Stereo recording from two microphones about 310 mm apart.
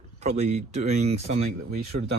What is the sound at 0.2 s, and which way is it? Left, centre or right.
Speech, right.